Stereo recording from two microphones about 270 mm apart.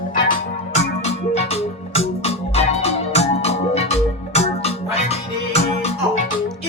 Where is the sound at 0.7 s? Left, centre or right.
Left.